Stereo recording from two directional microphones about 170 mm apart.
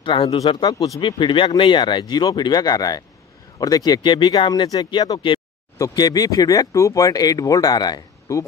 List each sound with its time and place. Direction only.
0.0 s speech: 30° left (ahead or behind)